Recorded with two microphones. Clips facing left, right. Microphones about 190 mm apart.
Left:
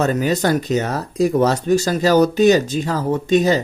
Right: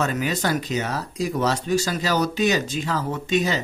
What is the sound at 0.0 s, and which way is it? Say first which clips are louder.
Speech: left 6 dB; 40° left (ahead or behind).